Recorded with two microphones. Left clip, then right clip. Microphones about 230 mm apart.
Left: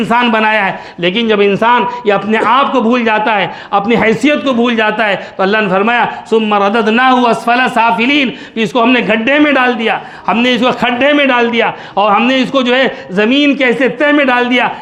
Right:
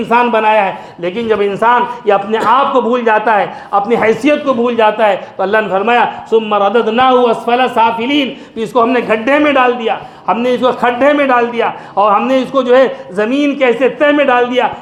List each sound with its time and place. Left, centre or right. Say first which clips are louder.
0.1 s a man's voice: right 1 dB; left